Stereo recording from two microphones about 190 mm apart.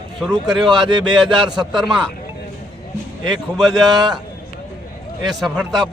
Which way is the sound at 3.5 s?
20° right (ahead or behind).